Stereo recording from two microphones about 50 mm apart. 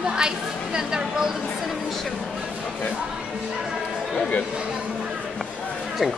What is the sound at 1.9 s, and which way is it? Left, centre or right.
Speech, centre.